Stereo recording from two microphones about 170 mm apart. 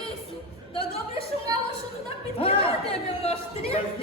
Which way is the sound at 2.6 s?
35° left (ahead or behind).